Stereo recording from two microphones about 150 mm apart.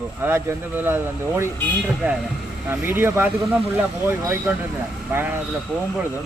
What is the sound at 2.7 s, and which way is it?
Speech, 15° right (ahead or behind).